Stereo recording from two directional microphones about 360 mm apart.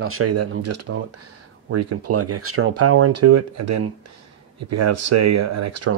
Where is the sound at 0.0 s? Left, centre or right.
Right.